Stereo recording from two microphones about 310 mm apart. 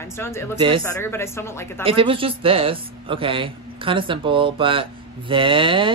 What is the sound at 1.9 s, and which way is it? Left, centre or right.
A man's voice, centre.